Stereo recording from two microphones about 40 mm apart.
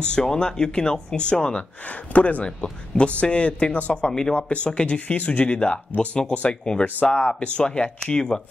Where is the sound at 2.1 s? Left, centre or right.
Left.